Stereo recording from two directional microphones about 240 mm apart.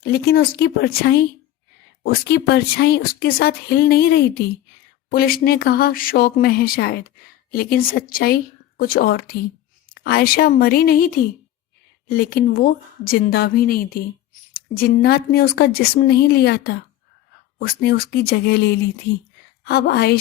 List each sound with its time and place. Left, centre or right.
0.0 s speech: left
12.1 s a woman's voice: left